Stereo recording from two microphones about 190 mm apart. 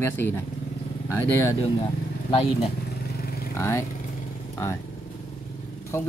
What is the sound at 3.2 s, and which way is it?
Vehicle, 55° left (ahead or behind).